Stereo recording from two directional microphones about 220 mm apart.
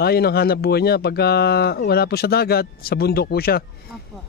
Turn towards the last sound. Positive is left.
turn(degrees=45)  # may be behind; listen again after turning